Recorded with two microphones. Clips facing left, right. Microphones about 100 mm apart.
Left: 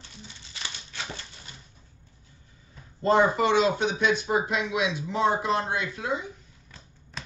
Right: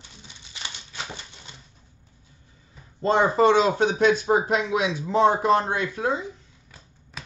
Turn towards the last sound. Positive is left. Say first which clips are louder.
# even
turn(degrees=-5)  # may be behind; listen again after turning